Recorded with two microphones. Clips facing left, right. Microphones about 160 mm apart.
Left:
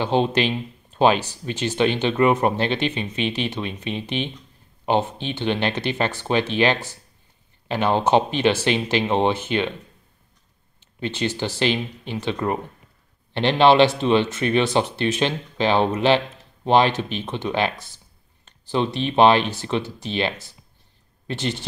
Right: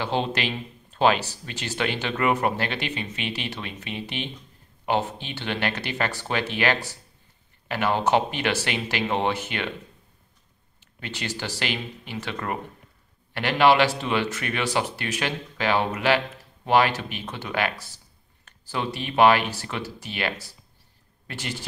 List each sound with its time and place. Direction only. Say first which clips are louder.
0.0 s speech: left 6 dB; 20° left (ahead or behind)
11.0 s speech: left 8 dB; 20° left (ahead or behind)